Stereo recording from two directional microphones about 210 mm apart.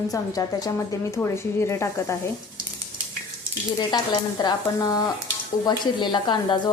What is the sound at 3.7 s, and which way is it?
Speech, 20° left (ahead or behind).